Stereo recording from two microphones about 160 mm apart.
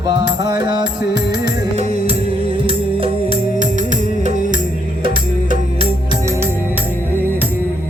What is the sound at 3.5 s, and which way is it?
Music, 50° right (ahead or behind).